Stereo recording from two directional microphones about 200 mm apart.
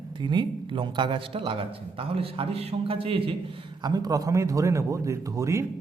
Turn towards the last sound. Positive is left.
turn(degrees=-15)  # may be behind; listen again after turning